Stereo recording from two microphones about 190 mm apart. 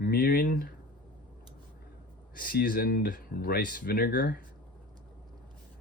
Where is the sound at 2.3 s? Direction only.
50° left (ahead or behind).